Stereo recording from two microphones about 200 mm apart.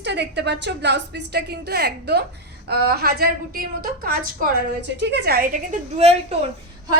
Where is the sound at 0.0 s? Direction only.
60° right (ahead or behind); by 6.1 s 35° right (ahead or behind).